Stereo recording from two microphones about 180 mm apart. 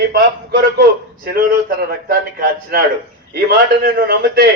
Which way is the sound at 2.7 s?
60° right (ahead or behind).